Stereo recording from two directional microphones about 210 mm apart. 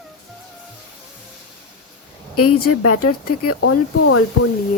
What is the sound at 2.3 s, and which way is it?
A woman's voice, 90° left.